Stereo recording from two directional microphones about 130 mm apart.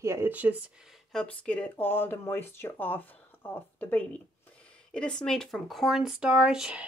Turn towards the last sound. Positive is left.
turn(degrees=-5)  # may be behind; listen again after turning